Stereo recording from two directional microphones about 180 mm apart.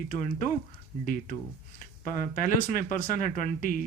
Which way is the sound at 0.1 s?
45° left (ahead or behind).